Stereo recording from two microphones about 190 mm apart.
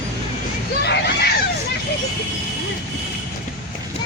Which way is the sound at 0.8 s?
60° left (ahead or behind).